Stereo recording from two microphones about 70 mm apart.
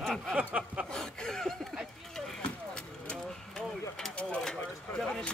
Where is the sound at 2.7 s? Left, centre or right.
Centre.